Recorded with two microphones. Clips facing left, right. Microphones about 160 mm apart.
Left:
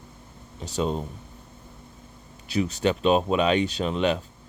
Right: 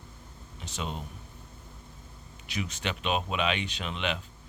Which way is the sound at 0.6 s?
35° left (ahead or behind).